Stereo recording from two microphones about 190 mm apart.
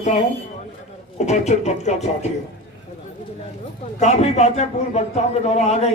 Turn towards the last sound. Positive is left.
turn(degrees=35)  # may be behind; listen again after turning